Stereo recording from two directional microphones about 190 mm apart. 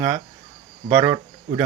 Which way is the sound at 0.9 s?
10° right (ahead or behind).